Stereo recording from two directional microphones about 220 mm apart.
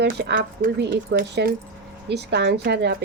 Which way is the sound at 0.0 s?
45° right (ahead or behind).